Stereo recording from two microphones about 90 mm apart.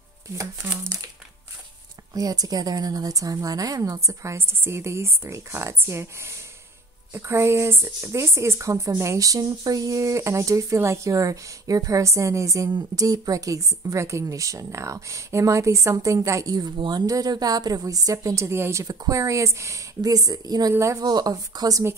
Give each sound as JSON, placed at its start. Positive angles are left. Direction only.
{"t": 0.9, "sound": "a woman's voice", "side_deg": -45}
{"t": 2.1, "sound": "speech", "side_deg": -45}
{"t": 16.7, "sound": "speech", "side_deg": -65}
{"t": 17.0, "sound": "a woman's voice", "side_deg": -40}
{"t": 20.7, "sound": "speech", "side_deg": -35}
{"t": 21.1, "sound": "a woman's voice", "side_deg": -50}